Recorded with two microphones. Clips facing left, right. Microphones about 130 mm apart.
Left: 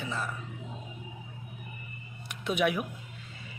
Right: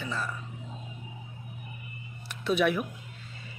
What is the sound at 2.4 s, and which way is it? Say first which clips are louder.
Speech: right 2 dB; 15° left (ahead or behind).